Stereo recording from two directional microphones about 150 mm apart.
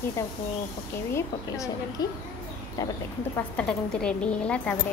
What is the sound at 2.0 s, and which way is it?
Speech, 25° left (ahead or behind).